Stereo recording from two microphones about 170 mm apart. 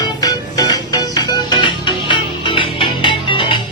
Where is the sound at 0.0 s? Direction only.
20° left (ahead or behind).